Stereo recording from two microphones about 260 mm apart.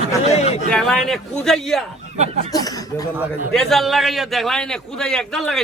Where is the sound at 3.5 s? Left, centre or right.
Centre.